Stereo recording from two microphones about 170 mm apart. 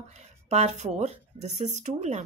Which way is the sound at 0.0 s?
40° right (ahead or behind).